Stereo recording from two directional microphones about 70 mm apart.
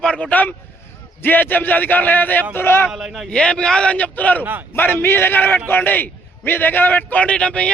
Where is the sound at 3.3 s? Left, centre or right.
Centre.